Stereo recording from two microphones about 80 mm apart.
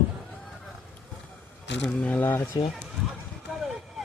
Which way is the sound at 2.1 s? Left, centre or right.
Left.